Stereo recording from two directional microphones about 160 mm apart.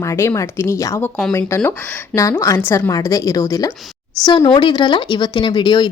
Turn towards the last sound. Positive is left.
turn(degrees=30)  # may be behind; listen again after turning